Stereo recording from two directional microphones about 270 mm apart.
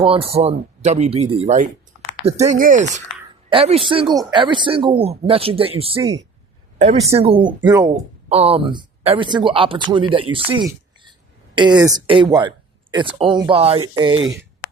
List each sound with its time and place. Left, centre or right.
0.0 s a woman's voice: right